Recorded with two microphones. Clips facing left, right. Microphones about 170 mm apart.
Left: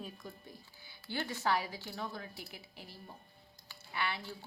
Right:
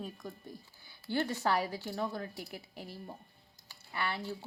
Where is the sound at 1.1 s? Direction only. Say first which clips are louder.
Right 3 dB; 40° right (ahead or behind).